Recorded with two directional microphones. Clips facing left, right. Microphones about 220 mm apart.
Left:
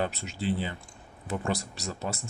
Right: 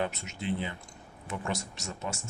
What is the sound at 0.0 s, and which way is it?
Speech, 35° left (ahead or behind).